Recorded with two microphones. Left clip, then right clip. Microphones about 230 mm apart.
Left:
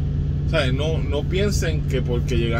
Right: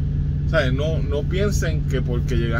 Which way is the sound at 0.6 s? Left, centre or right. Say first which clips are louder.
Right 1 dB; centre.